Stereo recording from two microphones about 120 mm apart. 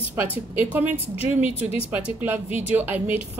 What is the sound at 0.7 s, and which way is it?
A woman's voice, 15° right (ahead or behind).